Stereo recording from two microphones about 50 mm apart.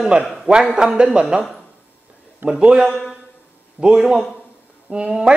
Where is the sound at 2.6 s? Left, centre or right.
Centre.